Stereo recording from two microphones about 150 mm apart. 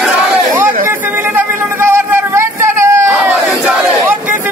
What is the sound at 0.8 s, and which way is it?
Vehicle, 15° right (ahead or behind).